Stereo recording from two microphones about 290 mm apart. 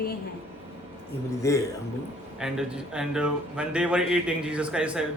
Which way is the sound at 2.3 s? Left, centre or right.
Centre.